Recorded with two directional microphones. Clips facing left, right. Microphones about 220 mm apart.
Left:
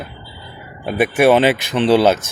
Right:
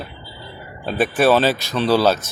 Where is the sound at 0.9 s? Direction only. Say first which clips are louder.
Left 3 dB; 10° left (ahead or behind).